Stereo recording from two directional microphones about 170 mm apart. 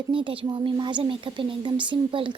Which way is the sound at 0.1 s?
30° right (ahead or behind).